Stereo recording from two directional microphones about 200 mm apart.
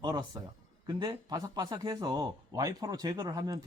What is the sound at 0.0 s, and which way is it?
Speech, 20° right (ahead or behind).